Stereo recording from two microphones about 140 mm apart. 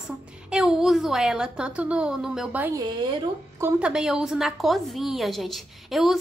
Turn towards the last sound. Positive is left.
turn(degrees=0)  # may be behind; listen again after turning